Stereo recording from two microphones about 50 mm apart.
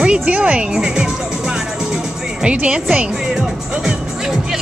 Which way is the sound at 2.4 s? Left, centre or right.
Right.